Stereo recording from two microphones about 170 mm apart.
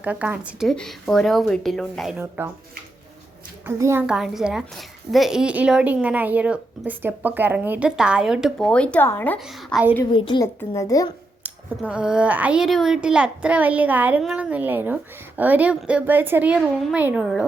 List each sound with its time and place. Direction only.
0.0 s a woman's voice: 10° right (ahead or behind)
3.7 s speech: 15° right (ahead or behind)
4.0 s a woman's voice: 5° right (ahead or behind)
9.4 s a woman's voice: centre (ahead or behind)
10.1 s speech: 30° left (ahead or behind)
10.4 s speech: 15° left (ahead or behind)
11.4 s speech: 5° right (ahead or behind)